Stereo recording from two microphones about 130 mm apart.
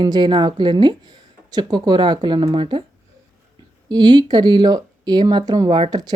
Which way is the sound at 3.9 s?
35° right (ahead or behind).